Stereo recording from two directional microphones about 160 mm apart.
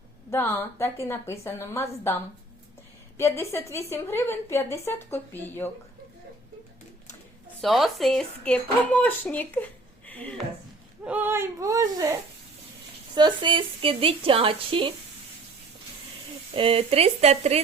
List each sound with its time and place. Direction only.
0.3 s a woman's voice: 15° left (ahead or behind)
3.2 s a woman's voice: 15° left (ahead or behind)
7.6 s speech: centre (ahead or behind)
10.1 s a sound: 10° left (ahead or behind)
11.0 s speech: 10° right (ahead or behind)
13.1 s a woman's voice: 30° right (ahead or behind)
16.6 s a woman's voice: 35° right (ahead or behind)